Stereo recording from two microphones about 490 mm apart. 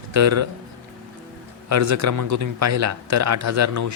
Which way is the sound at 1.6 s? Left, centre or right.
Right.